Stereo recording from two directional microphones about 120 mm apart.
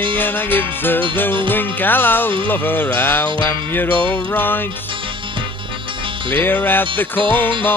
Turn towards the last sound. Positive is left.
turn(degrees=15)  # may be behind; listen again after turning